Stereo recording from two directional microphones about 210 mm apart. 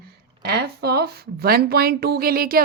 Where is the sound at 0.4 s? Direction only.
50° right (ahead or behind).